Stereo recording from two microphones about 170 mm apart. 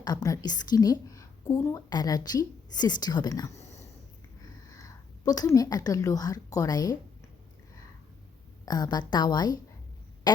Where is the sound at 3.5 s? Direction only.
40° left (ahead or behind).